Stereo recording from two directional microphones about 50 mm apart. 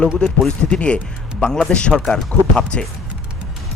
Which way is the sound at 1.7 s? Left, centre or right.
Left.